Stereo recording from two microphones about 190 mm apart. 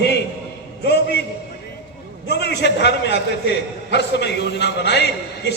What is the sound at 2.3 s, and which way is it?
A man's voice, 65° left (ahead or behind).